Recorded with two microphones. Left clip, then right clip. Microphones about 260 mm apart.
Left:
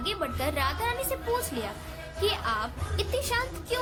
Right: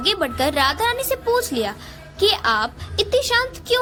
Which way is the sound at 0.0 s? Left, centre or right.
Right.